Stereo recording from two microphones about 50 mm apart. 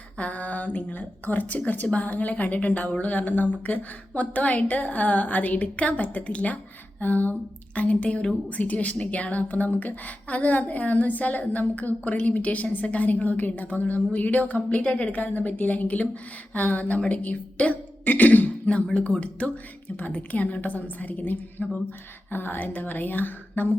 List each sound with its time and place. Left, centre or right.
0.2 s a woman's voice: left
18.0 s throat clearing: left
18.9 s a woman's voice: left
22.3 s a woman's voice: left